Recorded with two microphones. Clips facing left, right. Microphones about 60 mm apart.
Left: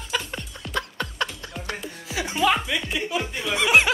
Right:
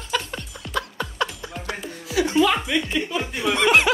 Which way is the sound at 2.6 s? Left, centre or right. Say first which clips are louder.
Right 3 dB; centre.